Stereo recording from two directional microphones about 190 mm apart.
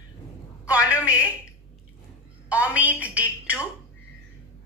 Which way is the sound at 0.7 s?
15° left (ahead or behind).